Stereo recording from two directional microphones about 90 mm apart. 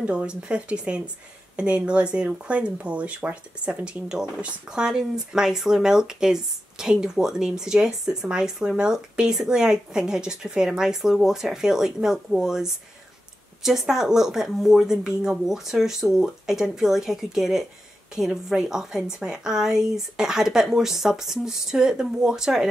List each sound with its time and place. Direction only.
0.0 s a woman's voice: 10° right (ahead or behind)